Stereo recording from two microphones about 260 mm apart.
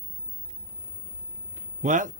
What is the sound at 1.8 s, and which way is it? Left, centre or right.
Speech, right.